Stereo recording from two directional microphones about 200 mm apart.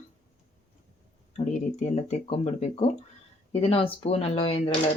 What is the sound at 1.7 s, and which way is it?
Speech, 35° left (ahead or behind).